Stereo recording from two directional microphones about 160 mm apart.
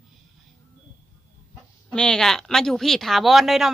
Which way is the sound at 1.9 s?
5° left (ahead or behind).